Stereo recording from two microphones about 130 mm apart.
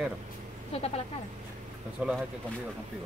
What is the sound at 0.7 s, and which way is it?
Speech, 50° left (ahead or behind).